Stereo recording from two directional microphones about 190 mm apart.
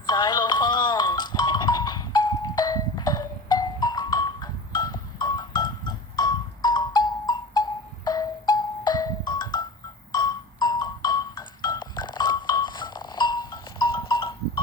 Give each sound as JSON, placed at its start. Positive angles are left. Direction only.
{"t": 0.0, "sound": "music", "side_deg": 20}